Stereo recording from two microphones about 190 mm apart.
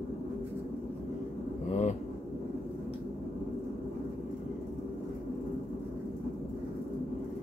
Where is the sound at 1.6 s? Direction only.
40° left (ahead or behind).